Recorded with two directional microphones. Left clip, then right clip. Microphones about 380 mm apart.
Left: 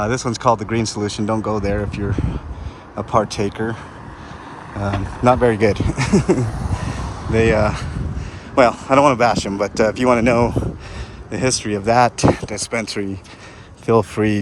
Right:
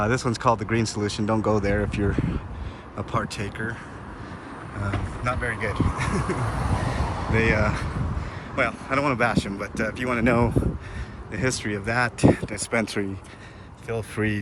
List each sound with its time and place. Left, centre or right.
0.0 s speech: centre
4.9 s speech: centre
6.5 s a sound: centre
7.3 s speech: centre